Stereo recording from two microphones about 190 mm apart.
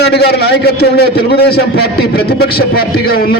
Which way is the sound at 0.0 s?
60° left (ahead or behind).